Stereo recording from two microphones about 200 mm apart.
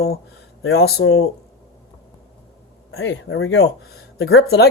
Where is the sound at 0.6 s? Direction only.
90° left.